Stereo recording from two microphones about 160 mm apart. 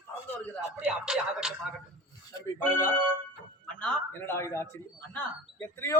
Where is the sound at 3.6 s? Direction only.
5° left (ahead or behind).